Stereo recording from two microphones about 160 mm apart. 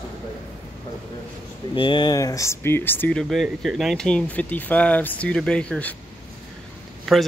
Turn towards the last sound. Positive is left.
turn(degrees=0)  # may be behind; listen again after turning